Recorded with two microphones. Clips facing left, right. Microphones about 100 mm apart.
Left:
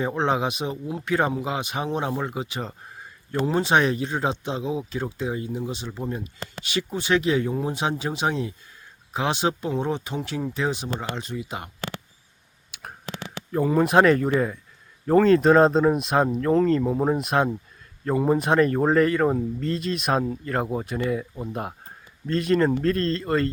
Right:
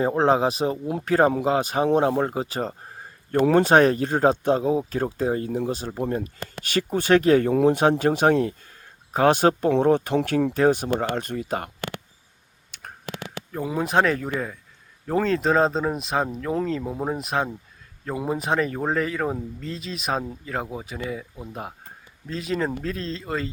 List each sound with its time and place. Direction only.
0.0 s speech: 40° right (ahead or behind)
3.4 s speech: 50° right (ahead or behind)
7.8 s speech: 50° right (ahead or behind)
12.7 s a sound: 10° left (ahead or behind)
13.5 s speech: centre (ahead or behind)